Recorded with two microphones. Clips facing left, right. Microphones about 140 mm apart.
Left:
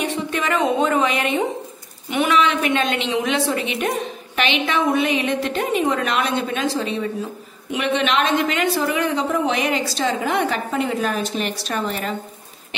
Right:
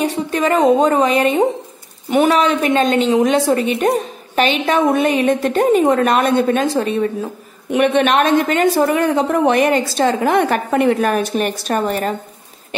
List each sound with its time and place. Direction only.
0.0 s a woman's voice: 35° right (ahead or behind)